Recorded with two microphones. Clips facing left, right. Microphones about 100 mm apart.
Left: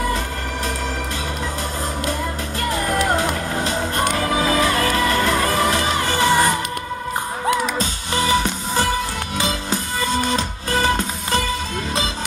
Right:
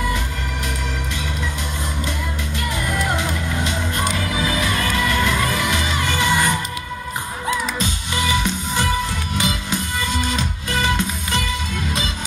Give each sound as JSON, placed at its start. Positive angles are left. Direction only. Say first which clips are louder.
{"t": 3.2, "sound": "music", "louder": "left 2 dB", "side_deg": 40}
{"t": 7.8, "sound": "music", "louder": "left 1 dB", "side_deg": 35}